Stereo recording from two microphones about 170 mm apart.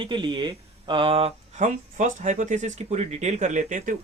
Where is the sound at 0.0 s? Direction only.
30° right (ahead or behind).